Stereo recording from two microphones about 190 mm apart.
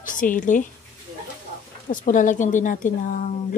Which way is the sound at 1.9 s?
45° left (ahead or behind).